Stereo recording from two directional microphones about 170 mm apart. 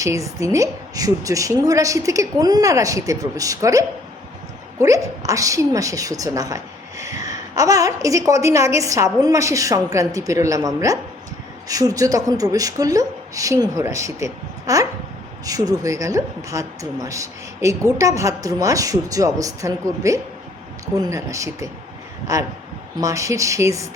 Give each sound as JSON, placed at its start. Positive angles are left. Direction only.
{"t": 0.0, "sound": "a woman's voice", "side_deg": -20}